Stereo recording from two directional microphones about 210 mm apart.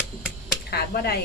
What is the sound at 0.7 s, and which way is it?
Speech, 50° left (ahead or behind).